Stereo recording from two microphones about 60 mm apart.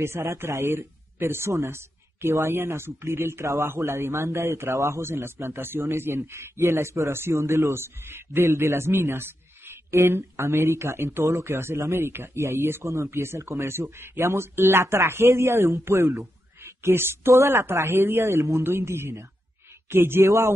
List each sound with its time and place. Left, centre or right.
0.0 s a man's voice: right
5.0 s a man's voice: right
7.3 s a man's voice: right
12.8 s a man's voice: right
16.2 s a sound: right
17.3 s a man's voice: right
18.6 s a man's voice: right
20.2 s a man's voice: right